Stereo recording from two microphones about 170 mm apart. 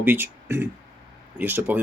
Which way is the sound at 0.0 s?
10° right (ahead or behind).